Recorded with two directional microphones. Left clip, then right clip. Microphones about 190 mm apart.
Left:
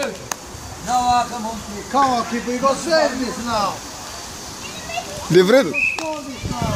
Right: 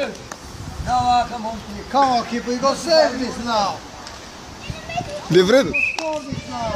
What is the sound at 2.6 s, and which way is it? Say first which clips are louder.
Speech: right 1 dB; 35° right (ahead or behind).